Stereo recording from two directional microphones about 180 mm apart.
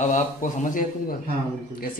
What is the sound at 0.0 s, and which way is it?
A man's voice, 45° left (ahead or behind).